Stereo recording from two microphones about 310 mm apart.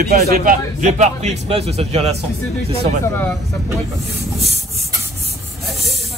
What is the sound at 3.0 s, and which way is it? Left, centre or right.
Speech, centre.